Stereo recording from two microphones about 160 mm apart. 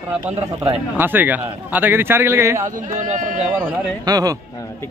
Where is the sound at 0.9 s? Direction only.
10° right (ahead or behind).